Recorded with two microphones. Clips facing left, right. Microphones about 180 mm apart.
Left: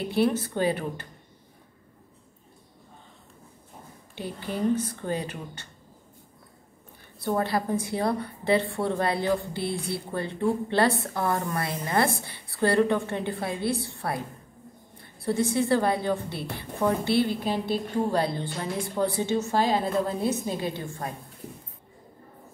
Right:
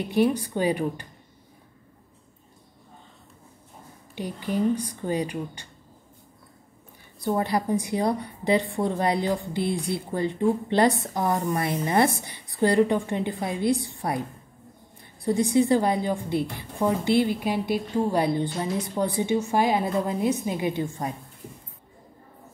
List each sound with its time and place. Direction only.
0.1 s a woman's voice: 15° right (ahead or behind)
4.1 s a woman's voice: 15° right (ahead or behind)
7.2 s a woman's voice: 15° right (ahead or behind)